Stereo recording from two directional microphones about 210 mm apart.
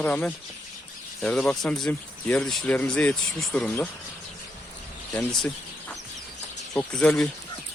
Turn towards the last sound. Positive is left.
turn(degrees=5)  # may be behind; listen again after turning